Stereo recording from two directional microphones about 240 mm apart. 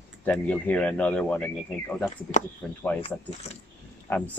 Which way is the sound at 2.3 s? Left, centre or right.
Left.